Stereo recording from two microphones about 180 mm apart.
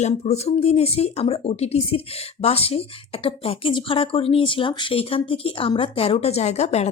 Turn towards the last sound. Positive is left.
turn(degrees=35)  # may be behind; listen again after turning